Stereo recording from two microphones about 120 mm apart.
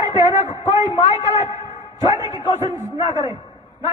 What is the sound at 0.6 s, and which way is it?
Speech, 60° left (ahead or behind).